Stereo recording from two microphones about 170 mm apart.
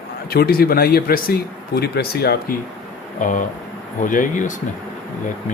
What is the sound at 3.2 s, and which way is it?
Speech, 50° left (ahead or behind).